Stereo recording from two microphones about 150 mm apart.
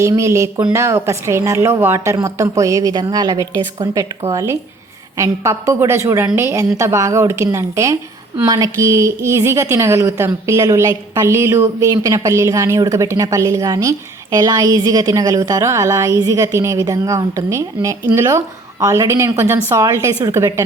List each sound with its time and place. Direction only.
0.0 s a woman's voice: 20° right (ahead or behind)